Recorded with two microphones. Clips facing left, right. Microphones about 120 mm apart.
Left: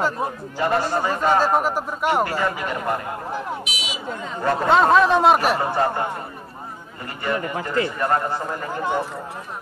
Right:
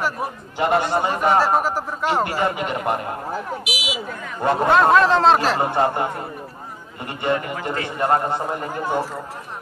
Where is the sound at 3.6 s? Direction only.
10° right (ahead or behind).